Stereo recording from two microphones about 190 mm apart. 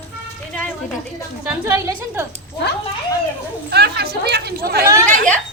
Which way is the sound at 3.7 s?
60° right (ahead or behind).